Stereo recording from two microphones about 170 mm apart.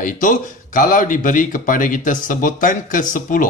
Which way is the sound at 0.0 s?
50° left (ahead or behind).